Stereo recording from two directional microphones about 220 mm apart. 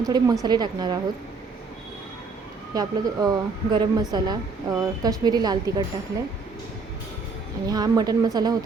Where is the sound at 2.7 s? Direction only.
15° right (ahead or behind).